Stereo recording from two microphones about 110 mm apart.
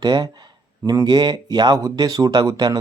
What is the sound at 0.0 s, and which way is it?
Speech, 40° right (ahead or behind).